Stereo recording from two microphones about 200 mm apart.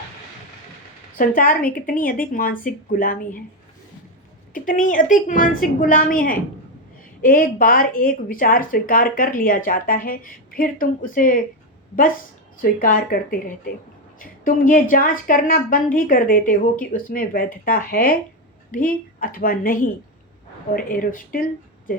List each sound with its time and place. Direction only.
1.2 s a woman's voice: 45° left (ahead or behind)
4.5 s a woman's voice: 40° left (ahead or behind)
12.8 s a woman's voice: 45° left (ahead or behind)
14.2 s a woman's voice: 45° left (ahead or behind)